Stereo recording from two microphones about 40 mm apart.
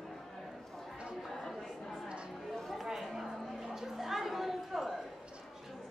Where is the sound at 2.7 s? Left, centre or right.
Centre.